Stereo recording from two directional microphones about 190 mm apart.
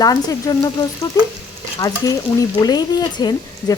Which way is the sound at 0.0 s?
20° left (ahead or behind).